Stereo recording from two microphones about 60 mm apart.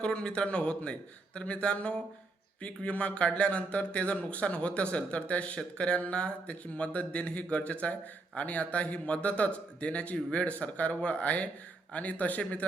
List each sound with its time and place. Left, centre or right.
0.0 s a man's voice: centre